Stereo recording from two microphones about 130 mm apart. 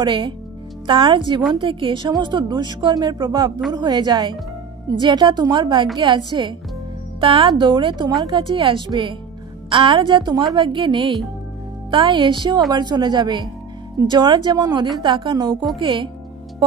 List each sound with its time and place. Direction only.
0.0 s speech: 35° right (ahead or behind)